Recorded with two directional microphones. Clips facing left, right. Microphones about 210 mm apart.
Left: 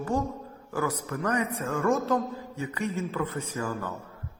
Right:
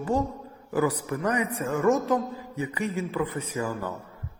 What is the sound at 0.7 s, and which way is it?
A man's voice, 15° right (ahead or behind).